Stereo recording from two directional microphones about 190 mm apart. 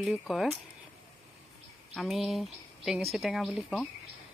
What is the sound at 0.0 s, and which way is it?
Speech, centre (ahead or behind).